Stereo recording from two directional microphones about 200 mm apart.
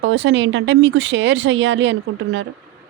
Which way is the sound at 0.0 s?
70° right (ahead or behind).